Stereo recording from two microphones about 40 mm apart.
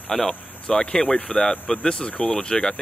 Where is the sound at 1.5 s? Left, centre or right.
Left.